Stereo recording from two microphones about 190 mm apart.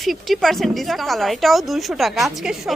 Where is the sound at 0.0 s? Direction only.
Centre (ahead or behind).